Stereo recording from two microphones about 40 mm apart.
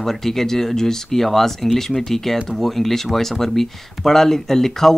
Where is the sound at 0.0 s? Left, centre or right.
Centre.